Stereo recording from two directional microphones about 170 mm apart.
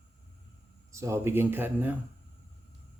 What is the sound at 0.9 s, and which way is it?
Speech, 15° right (ahead or behind).